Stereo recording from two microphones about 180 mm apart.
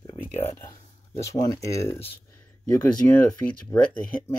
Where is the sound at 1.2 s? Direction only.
15° left (ahead or behind).